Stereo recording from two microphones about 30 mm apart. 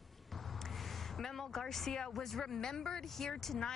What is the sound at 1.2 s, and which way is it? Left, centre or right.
A woman's voice, centre.